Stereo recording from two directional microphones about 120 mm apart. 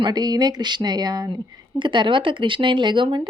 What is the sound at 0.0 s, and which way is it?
A woman's voice, 35° right (ahead or behind).